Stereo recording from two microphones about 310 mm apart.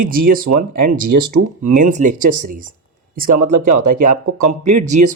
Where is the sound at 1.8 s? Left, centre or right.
Right.